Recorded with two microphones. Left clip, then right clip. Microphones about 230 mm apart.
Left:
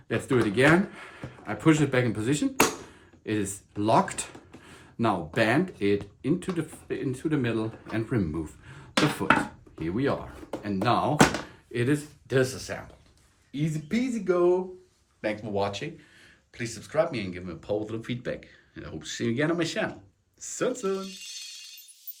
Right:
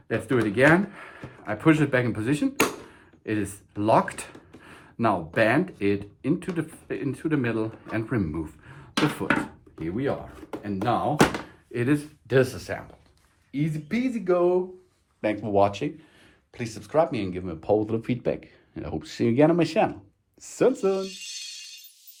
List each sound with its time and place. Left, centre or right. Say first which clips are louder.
0.1 s speech: right 1 dB; centre
12.3 s speech: right 3 dB; right
20.9 s music: right 4 dB; centre